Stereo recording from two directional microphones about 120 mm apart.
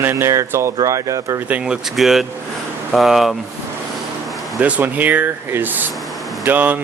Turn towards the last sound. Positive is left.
turn(degrees=-15)  # may be behind; listen again after turning